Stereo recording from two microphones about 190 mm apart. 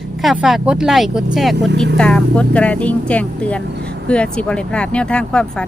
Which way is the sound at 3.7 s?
60° right (ahead or behind).